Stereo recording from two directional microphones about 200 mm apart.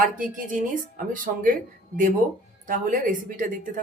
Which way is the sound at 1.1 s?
45° right (ahead or behind).